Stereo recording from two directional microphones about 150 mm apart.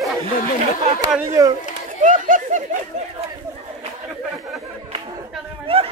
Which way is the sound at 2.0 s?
60° right (ahead or behind).